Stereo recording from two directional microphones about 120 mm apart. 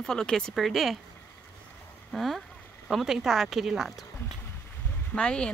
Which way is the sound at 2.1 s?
Centre (ahead or behind).